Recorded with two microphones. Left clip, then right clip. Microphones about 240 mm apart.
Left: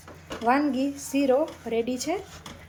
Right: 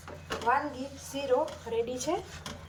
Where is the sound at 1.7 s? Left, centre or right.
Centre.